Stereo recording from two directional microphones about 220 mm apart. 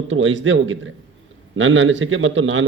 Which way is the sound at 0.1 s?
60° right (ahead or behind).